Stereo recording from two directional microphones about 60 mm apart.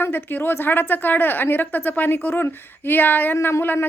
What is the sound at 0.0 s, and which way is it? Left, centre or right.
A woman's voice, left.